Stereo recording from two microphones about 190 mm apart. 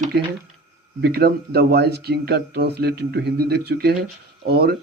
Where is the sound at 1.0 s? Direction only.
55° right (ahead or behind).